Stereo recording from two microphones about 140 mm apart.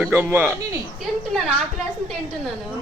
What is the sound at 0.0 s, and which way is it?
Speech, 10° right (ahead or behind).